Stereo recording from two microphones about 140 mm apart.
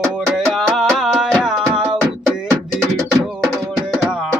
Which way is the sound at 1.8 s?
20° right (ahead or behind).